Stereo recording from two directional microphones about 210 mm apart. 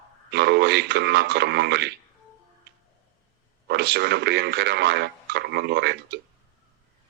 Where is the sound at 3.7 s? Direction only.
50° right (ahead or behind).